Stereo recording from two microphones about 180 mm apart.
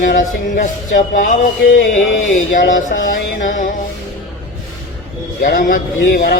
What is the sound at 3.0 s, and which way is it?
Speech, 45° left (ahead or behind).